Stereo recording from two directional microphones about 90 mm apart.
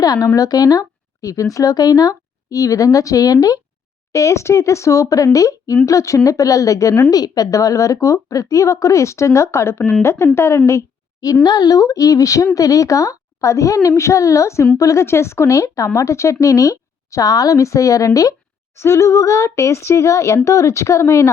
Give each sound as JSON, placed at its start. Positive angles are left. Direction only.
{"t": 0.0, "sound": "a woman's voice", "side_deg": 45}
{"t": 10.7, "sound": "a sound", "side_deg": 35}
{"t": 11.4, "sound": "speech", "side_deg": 50}